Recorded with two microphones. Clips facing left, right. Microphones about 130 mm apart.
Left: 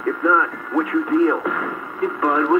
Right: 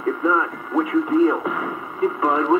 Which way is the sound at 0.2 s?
25° right (ahead or behind).